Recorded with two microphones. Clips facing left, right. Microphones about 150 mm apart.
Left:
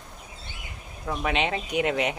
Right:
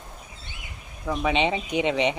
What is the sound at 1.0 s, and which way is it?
Speech, centre (ahead or behind).